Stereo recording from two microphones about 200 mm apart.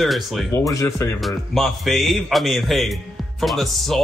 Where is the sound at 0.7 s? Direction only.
15° left (ahead or behind).